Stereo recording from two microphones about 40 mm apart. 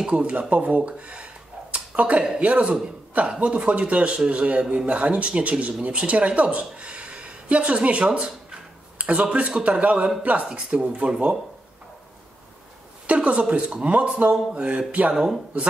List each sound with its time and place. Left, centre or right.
0.0 s a man's voice: right
1.7 s a sound: right
2.4 s a man's voice: right
6.6 s a sound: right
9.5 s speech: right
13.0 s a man's voice: right